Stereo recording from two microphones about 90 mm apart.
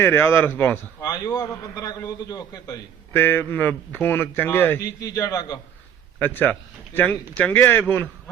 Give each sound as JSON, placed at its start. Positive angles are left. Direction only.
{"t": 0.0, "sound": "a man's voice", "side_deg": 25}
{"t": 1.7, "sound": "a man's voice", "side_deg": 45}
{"t": 3.1, "sound": "a man's voice", "side_deg": 25}
{"t": 5.0, "sound": "a man's voice", "side_deg": 40}
{"t": 6.1, "sound": "a man's voice", "side_deg": 20}